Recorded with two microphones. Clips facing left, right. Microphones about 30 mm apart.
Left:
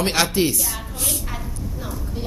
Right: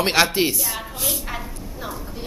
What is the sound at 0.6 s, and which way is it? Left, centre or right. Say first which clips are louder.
Speech: right 1 dB; centre.